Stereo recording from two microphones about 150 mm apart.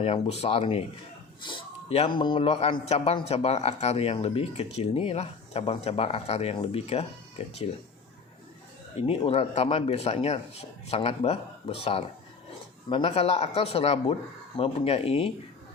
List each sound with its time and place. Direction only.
0.0 s speech: 45° left (ahead or behind)
9.0 s speech: 40° left (ahead or behind)